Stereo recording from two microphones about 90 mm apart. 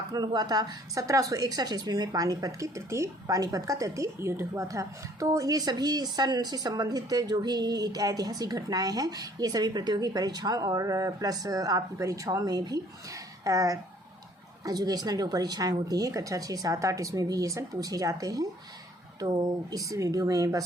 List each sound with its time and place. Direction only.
0.1 s a woman's voice: 45° right (ahead or behind)